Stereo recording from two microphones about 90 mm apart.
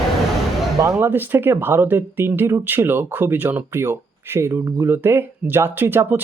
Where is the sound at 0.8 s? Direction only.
35° right (ahead or behind).